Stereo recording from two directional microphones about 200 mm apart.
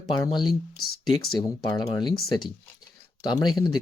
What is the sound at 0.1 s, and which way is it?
Speech, 20° left (ahead or behind).